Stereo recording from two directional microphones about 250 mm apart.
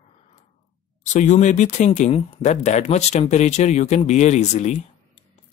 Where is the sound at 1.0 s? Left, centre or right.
Left.